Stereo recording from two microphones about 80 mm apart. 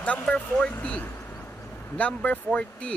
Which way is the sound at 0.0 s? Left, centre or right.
Centre.